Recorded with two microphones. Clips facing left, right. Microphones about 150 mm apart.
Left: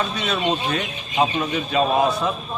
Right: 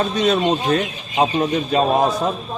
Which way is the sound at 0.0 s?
35° right (ahead or behind).